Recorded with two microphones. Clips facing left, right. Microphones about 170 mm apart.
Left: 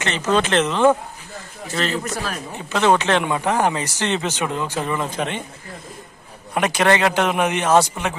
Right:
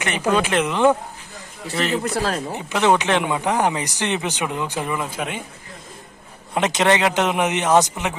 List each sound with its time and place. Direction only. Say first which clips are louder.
0.0 s speech: even; 10° right (ahead or behind)
2.1 s speech: right 5 dB; 30° right (ahead or behind)
2.5 s speech: left 2 dB; 15° right (ahead or behind)
6.5 s a man's voice: even; 20° right (ahead or behind)